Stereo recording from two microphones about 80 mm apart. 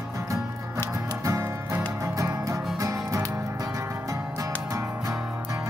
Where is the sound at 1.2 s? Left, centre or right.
Right.